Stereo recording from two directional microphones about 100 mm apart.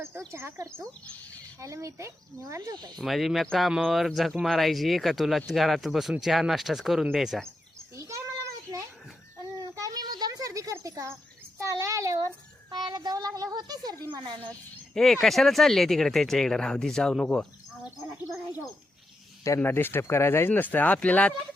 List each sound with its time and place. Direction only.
0.3 s speech: 25° right (ahead or behind)
0.7 s speech: 10° left (ahead or behind)
1.6 s speech: 30° right (ahead or behind)
3.0 s speech: centre (ahead or behind)
7.9 s a sound: 30° right (ahead or behind)
12.7 s a child's voice: 45° right (ahead or behind)
14.9 s speech: 5° left (ahead or behind)
19.5 s speech: 20° left (ahead or behind)